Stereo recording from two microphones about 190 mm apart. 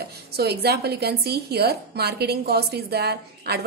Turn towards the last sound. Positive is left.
turn(degrees=-60)  # may be behind; listen again after turning